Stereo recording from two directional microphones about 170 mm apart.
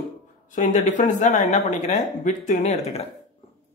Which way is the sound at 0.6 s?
50° left (ahead or behind).